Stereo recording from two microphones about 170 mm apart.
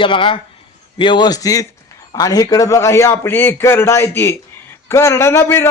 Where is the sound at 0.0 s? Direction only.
30° left (ahead or behind).